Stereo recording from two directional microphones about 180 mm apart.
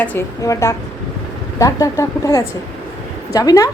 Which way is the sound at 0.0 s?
10° left (ahead or behind).